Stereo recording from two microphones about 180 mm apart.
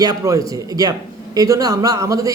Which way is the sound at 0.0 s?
20° right (ahead or behind).